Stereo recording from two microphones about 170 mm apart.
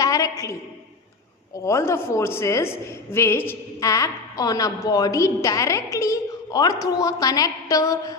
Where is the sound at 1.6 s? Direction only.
15° left (ahead or behind).